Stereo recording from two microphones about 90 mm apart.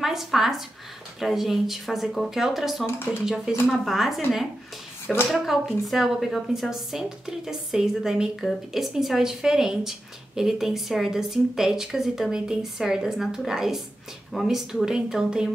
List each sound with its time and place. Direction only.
0.0 s a woman's voice: 5° right (ahead or behind)
5.0 s speech: 25° left (ahead or behind)
5.3 s a woman's voice: centre (ahead or behind)